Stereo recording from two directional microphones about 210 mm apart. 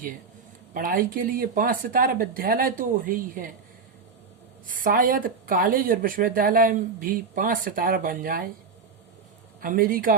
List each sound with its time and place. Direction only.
0.7 s speech: 40° right (ahead or behind)
4.6 s speech: 40° right (ahead or behind)
9.6 s speech: 40° right (ahead or behind)